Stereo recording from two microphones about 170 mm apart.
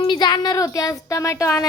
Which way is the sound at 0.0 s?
25° left (ahead or behind).